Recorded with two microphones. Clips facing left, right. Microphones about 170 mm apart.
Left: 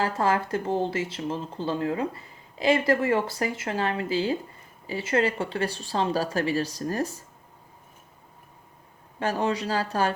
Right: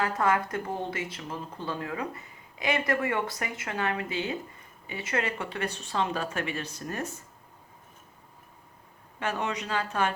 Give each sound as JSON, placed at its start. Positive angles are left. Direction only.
{"t": 0.0, "sound": "speech", "side_deg": 30}
{"t": 9.1, "sound": "speech", "side_deg": 35}